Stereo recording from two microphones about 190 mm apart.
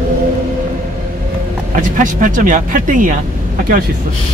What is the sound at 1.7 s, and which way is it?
Speech, 45° right (ahead or behind).